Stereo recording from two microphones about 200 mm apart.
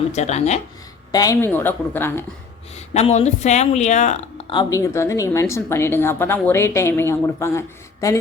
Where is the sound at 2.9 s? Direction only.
30° left (ahead or behind).